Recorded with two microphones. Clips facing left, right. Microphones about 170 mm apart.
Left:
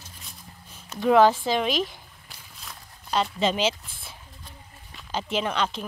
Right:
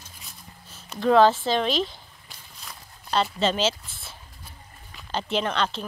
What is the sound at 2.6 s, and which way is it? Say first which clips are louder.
Walk: even; centre (ahead or behind).